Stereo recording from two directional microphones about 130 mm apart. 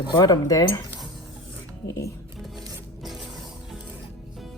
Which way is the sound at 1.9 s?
25° left (ahead or behind).